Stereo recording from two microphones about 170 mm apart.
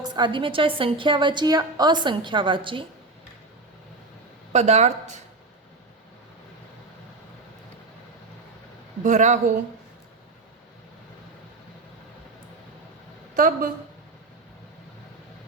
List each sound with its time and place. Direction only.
0.0 s a woman's voice: 25° right (ahead or behind)
4.5 s speech: 40° right (ahead or behind)
9.0 s speech: 45° right (ahead or behind)
13.3 s a woman's voice: 55° right (ahead or behind)